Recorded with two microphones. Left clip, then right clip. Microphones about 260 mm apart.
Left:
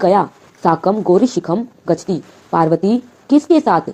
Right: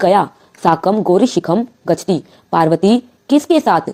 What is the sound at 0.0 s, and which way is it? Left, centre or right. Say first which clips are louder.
Speech: right 1 dB; right.